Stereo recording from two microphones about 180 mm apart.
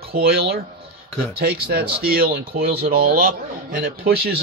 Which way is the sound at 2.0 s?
55° right (ahead or behind).